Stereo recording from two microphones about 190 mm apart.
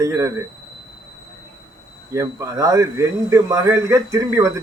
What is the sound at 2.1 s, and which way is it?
Speech, 15° right (ahead or behind).